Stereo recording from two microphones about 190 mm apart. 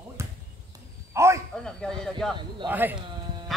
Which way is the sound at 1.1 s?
15° right (ahead or behind).